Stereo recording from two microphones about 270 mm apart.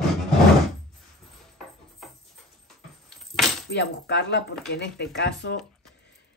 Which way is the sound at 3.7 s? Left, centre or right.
Left.